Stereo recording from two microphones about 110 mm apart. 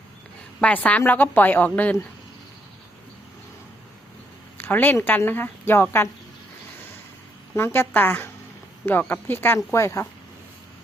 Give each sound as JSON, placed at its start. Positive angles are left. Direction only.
{"t": 0.6, "sound": "speech", "side_deg": 15}
{"t": 4.5, "sound": "speech", "side_deg": 15}
{"t": 7.5, "sound": "a woman's voice", "side_deg": 20}